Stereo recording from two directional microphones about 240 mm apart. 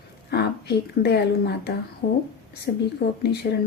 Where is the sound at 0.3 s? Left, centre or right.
Left.